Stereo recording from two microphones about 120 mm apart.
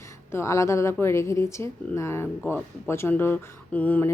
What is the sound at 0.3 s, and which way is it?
A woman's voice, 20° left (ahead or behind).